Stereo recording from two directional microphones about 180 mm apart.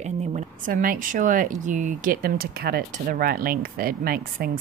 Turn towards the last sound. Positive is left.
turn(degrees=-55)  # may be behind; listen again after turning